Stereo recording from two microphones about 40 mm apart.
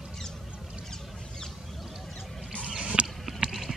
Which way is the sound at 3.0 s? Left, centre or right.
Right.